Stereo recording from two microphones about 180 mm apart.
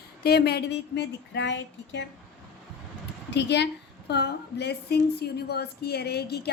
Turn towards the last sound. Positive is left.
turn(degrees=65)  # may be behind; listen again after turning